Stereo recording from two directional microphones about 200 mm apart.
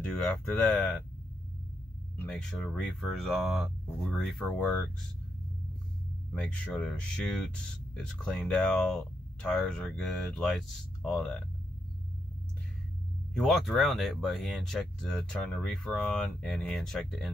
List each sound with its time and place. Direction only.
0.0 s speech: 5° left (ahead or behind)
2.1 s speech: 5° left (ahead or behind)
6.3 s speech: 5° left (ahead or behind)
13.3 s speech: centre (ahead or behind)